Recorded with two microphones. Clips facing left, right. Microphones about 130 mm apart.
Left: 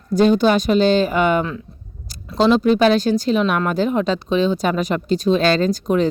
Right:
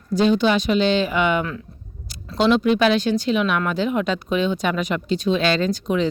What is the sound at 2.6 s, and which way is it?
Speech, 40° left (ahead or behind).